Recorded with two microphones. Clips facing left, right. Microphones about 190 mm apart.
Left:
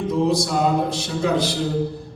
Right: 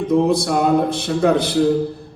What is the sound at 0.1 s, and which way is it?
A man's voice, 55° right (ahead or behind).